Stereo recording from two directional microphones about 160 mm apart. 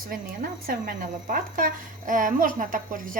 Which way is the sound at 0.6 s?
60° right (ahead or behind).